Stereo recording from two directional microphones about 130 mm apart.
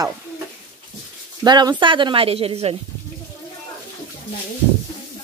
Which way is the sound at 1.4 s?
35° right (ahead or behind).